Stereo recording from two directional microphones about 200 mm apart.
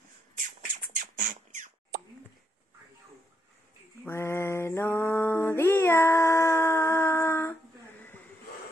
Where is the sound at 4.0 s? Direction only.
10° left (ahead or behind).